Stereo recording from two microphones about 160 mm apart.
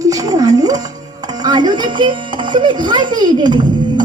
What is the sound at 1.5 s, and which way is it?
A child's voice, 25° right (ahead or behind).